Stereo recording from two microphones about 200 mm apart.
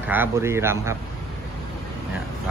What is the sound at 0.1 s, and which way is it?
Speech, 10° right (ahead or behind).